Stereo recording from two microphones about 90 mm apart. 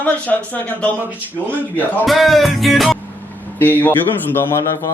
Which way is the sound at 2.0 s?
Centre (ahead or behind).